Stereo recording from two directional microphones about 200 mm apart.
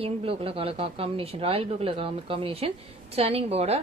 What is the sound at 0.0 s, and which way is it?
A woman's voice, 30° right (ahead or behind).